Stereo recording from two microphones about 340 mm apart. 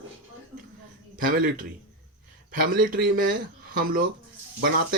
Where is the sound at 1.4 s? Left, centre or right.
Right.